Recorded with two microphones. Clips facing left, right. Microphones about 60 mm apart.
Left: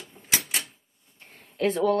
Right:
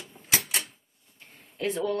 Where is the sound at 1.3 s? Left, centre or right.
Left.